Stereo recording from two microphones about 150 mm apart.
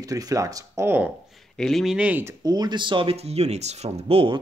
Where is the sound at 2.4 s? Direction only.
25° right (ahead or behind).